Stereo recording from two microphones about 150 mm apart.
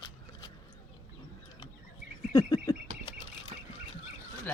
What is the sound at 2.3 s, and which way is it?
Frog, 30° left (ahead or behind).